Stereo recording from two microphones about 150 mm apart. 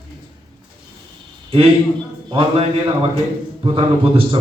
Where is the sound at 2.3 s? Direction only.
40° right (ahead or behind).